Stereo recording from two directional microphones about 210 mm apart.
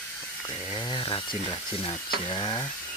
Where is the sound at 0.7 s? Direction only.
20° left (ahead or behind).